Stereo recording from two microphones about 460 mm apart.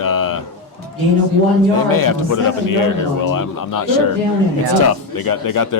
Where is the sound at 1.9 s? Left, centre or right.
Left.